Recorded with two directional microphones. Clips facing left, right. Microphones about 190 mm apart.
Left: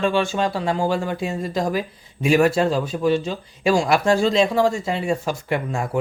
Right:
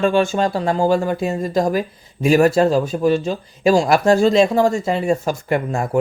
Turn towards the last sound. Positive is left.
turn(degrees=-45)  # may be behind; listen again after turning